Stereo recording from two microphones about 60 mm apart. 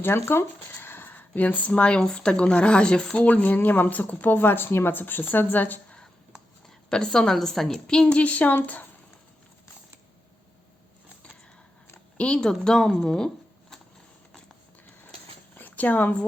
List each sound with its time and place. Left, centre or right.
0.3 s speech: left
6.9 s a woman's voice: centre
8.0 s speech: left
12.1 s speech: centre
15.5 s zipper: left